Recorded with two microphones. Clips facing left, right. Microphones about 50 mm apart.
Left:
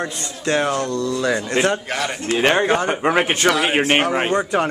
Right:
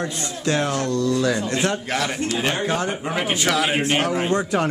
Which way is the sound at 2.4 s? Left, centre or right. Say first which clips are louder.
Left 8 dB; left.